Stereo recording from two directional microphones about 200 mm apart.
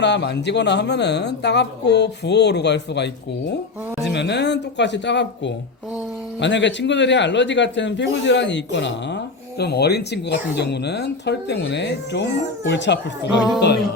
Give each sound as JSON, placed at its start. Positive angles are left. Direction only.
{"t": 0.0, "sound": "speech", "side_deg": 60}
{"t": 4.1, "sound": "speech", "side_deg": 60}